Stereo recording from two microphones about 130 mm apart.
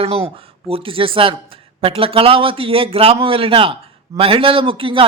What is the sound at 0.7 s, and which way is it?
Speech, 45° right (ahead or behind).